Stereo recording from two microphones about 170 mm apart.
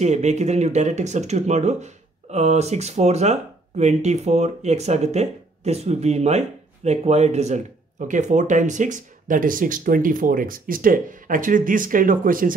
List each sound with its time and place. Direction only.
0.0 s speech: 40° right (ahead or behind)